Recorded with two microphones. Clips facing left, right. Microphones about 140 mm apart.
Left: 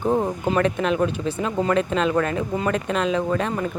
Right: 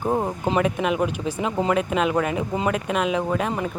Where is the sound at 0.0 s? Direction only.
15° right (ahead or behind).